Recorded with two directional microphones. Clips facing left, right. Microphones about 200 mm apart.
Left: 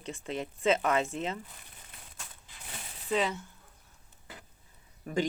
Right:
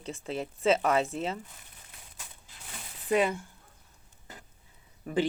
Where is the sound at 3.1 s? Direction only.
10° right (ahead or behind).